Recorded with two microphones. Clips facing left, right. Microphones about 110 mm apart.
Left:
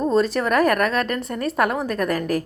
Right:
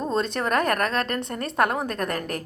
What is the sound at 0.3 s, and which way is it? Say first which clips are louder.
A woman's voice: left 4 dB; 35° right (ahead or behind).